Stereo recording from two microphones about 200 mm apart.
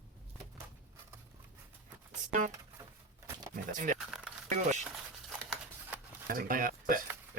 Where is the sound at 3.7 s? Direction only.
40° right (ahead or behind).